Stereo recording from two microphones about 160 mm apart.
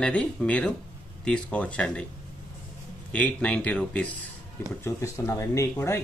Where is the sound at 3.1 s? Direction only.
10° left (ahead or behind).